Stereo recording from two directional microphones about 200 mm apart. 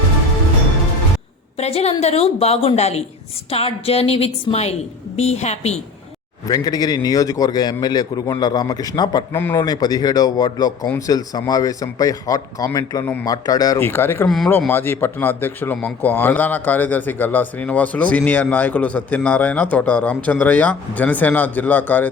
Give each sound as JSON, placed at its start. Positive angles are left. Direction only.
{"t": 1.5, "sound": "a woman's voice", "side_deg": 30}
{"t": 6.5, "sound": "a man's voice", "side_deg": 20}